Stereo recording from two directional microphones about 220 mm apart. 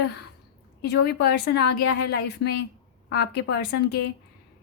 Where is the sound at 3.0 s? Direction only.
45° left (ahead or behind).